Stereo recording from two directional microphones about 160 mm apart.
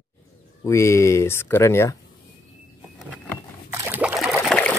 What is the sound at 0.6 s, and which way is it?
Speech, 20° left (ahead or behind).